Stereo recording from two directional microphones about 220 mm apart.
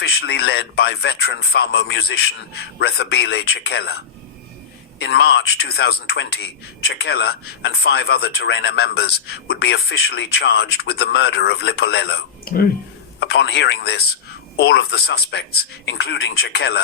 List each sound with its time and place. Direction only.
0.0 s a man's voice: 45° left (ahead or behind)